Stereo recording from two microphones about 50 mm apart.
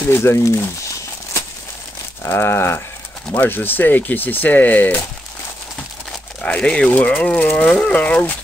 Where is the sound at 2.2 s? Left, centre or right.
Left.